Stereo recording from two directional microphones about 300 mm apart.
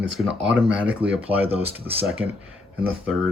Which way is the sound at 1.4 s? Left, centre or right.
Centre.